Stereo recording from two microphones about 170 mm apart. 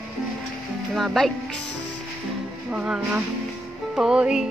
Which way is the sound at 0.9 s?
Centre (ahead or behind).